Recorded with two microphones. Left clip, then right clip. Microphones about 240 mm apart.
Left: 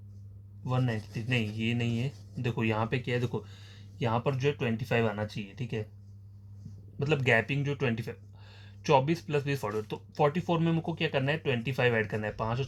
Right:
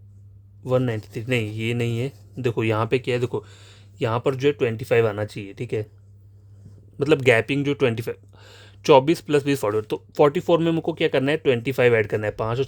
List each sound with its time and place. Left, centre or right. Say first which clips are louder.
0.6 s speech: right 11 dB; right
7.0 s speech: right 9 dB; right